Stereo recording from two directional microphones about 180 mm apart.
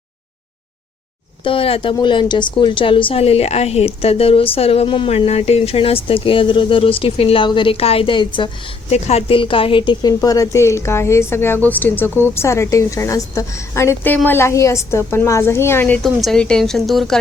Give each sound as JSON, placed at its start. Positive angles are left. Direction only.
{"t": 1.5, "sound": "a woman's voice", "side_deg": 30}
{"t": 16.0, "sound": "speech", "side_deg": 0}